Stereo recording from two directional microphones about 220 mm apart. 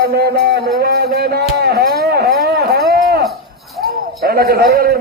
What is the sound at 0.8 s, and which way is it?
Music, 45° right (ahead or behind).